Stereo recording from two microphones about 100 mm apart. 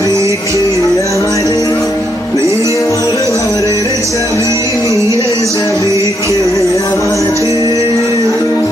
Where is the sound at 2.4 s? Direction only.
30° right (ahead or behind).